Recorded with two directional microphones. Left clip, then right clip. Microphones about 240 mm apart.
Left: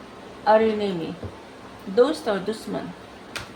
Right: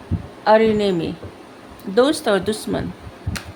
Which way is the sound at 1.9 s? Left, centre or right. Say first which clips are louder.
Right 4 dB; right.